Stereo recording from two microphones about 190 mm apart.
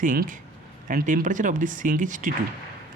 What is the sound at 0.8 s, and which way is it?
Speech, 45° right (ahead or behind).